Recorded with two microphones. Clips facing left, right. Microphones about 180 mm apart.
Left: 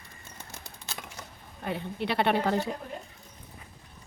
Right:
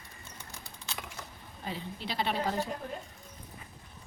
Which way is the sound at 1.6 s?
60° left (ahead or behind).